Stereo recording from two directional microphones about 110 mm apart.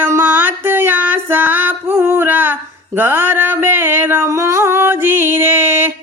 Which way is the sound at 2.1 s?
20° right (ahead or behind).